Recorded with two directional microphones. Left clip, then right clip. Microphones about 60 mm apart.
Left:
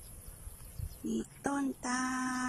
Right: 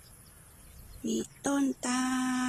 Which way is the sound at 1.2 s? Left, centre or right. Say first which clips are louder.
Right 5 dB; right.